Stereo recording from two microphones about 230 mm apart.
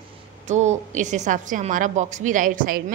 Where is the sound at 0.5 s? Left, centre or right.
Right.